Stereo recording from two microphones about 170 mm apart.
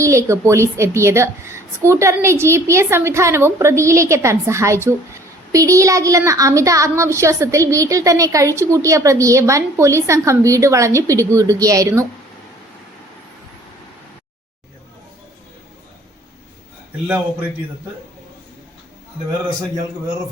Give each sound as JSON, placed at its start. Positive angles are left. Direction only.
{"t": 0.0, "sound": "a woman's voice", "side_deg": -15}